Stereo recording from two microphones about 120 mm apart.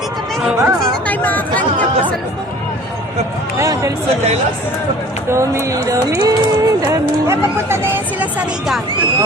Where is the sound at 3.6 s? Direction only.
25° right (ahead or behind).